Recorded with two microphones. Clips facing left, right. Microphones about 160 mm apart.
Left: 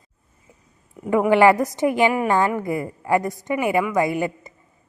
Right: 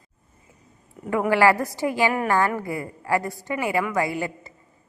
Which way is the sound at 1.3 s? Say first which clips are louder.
Left 4 dB; 20° left (ahead or behind).